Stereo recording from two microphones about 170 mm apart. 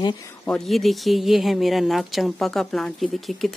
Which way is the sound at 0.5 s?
Centre (ahead or behind).